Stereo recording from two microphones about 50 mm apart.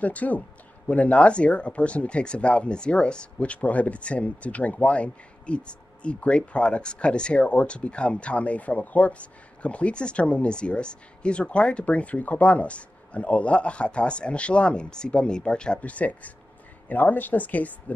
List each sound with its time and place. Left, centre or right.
0.0 s speech: left